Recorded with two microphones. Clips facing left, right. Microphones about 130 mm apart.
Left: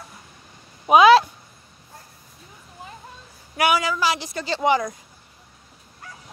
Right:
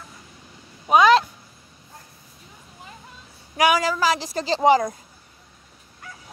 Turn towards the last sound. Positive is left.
turn(degrees=-35)  # may be behind; listen again after turning